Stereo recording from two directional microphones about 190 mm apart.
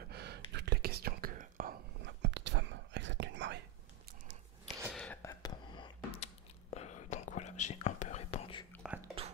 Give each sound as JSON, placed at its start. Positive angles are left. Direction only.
{"t": 0.1, "sound": "whispering", "side_deg": -60}
{"t": 4.9, "sound": "a sound", "side_deg": 5}
{"t": 5.3, "sound": "whispering", "side_deg": 20}
{"t": 8.8, "sound": "whispering", "side_deg": -10}